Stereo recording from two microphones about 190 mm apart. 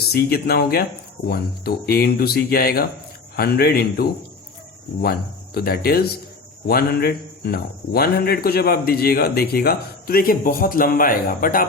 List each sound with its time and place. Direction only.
0.1 s speech: 55° left (ahead or behind)
5.5 s speech: 55° left (ahead or behind)